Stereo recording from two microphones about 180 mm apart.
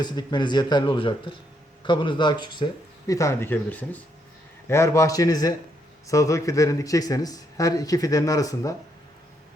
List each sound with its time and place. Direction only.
0.0 s speech: 25° left (ahead or behind)